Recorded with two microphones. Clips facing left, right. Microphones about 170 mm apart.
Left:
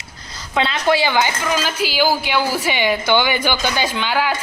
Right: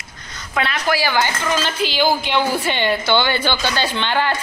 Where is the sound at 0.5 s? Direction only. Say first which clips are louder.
Left 3 dB; 25° left (ahead or behind).